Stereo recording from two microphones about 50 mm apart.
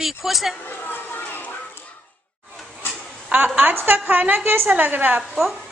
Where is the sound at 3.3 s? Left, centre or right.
Right.